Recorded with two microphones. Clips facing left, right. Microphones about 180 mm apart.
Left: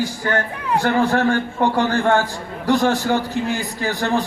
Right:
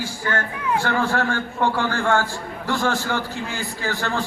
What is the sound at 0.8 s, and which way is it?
A man's voice, 15° left (ahead or behind).